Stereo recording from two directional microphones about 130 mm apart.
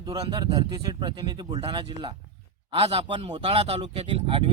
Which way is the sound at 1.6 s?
40° right (ahead or behind).